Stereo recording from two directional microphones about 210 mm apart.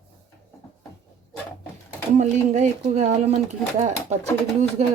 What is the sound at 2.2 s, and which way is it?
Speech, 35° right (ahead or behind).